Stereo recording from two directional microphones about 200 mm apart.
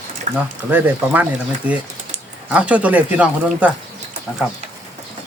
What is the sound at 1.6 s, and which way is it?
Speech, 5° right (ahead or behind).